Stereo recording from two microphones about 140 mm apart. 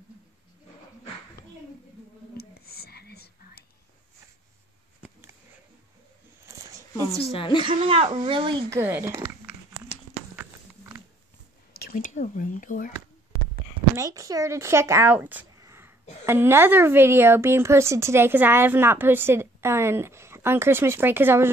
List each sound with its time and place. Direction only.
2.3 s a sound: 90° left
7.2 s a woman's voice: 40° left (ahead or behind)
7.5 s speech: 35° right (ahead or behind)
8.6 s speech: 15° right (ahead or behind)
10.3 s a sound: 15° right (ahead or behind)
11.9 s speech: 60° left (ahead or behind)
13.9 s a woman's voice: 25° right (ahead or behind)